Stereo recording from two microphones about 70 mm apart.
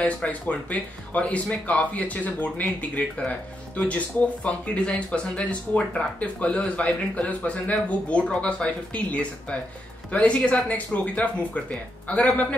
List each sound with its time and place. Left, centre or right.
0.0 s speech: centre